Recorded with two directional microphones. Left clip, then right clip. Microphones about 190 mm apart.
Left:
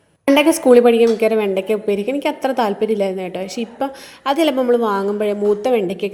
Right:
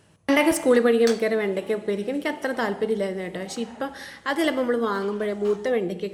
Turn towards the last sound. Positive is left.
turn(degrees=30)  # may be behind; listen again after turning